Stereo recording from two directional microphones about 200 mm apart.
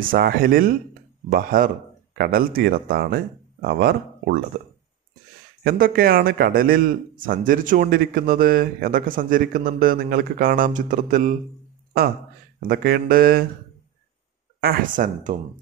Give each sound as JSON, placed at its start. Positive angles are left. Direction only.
{"t": 0.0, "sound": "speech", "side_deg": -45}
{"t": 5.6, "sound": "speech", "side_deg": -50}
{"t": 12.5, "sound": "speech", "side_deg": -50}
{"t": 14.6, "sound": "speech", "side_deg": -45}